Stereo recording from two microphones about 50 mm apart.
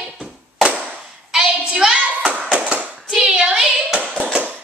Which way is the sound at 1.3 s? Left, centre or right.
Centre.